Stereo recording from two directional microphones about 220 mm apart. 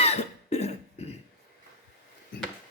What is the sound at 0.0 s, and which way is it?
Cough, 30° left (ahead or behind).